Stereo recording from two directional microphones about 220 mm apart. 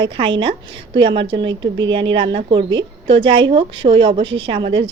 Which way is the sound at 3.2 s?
20° right (ahead or behind).